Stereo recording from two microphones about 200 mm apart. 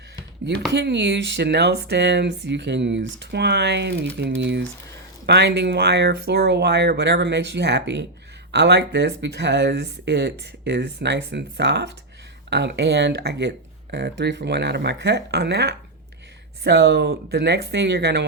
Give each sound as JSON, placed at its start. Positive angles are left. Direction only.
{"t": 0.7, "sound": "speech", "side_deg": -60}